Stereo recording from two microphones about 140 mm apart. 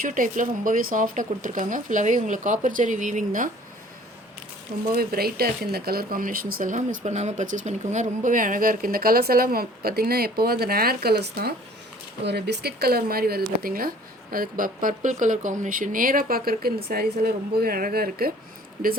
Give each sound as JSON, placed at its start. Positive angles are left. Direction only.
{"t": 0.0, "sound": "speech", "side_deg": -70}
{"t": 4.9, "sound": "speech", "side_deg": -90}
{"t": 12.8, "sound": "speech", "side_deg": -90}